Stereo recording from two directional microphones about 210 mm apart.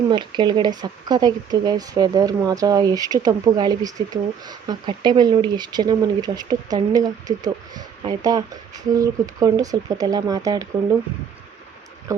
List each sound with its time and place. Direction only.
0.1 s speech: 20° right (ahead or behind)